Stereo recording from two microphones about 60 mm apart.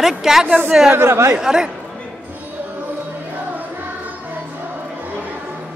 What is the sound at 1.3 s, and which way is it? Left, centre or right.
Speech, centre.